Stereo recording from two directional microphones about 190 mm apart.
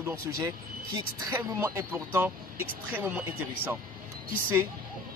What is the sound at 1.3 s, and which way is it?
Speech, 10° right (ahead or behind).